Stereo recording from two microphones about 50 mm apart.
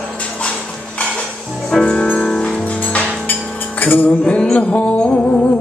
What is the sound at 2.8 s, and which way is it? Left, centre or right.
Music, left.